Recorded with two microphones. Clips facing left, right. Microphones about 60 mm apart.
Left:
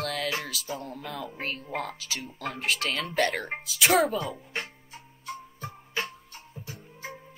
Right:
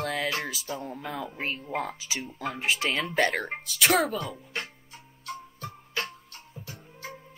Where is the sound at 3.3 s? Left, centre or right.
Centre.